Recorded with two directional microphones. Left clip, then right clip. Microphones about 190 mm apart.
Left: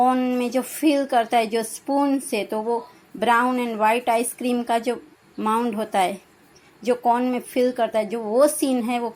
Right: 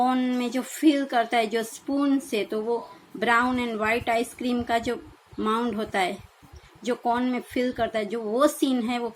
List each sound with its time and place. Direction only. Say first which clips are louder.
0.0 s speech: left 4 dB; 15° left (ahead or behind)